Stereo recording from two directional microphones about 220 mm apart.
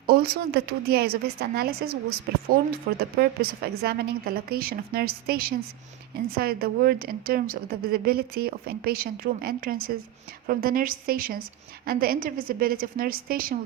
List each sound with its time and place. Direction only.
0.1 s a woman's voice: 45° right (ahead or behind)